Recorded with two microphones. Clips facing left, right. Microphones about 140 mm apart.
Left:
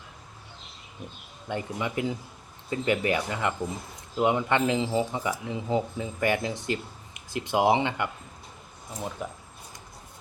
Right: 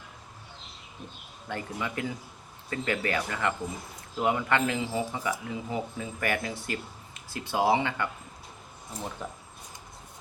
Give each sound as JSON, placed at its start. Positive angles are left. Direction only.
{"t": 1.5, "sound": "speech", "side_deg": 20}
{"t": 9.2, "sound": "speech", "side_deg": 10}